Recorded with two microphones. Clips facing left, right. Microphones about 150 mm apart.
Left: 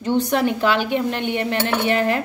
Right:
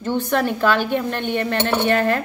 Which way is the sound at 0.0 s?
15° left (ahead or behind).